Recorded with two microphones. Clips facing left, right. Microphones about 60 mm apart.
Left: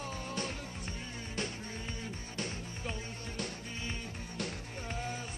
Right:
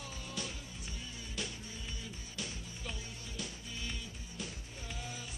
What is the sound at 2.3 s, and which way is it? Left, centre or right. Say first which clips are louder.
Music: left 4 dB; left.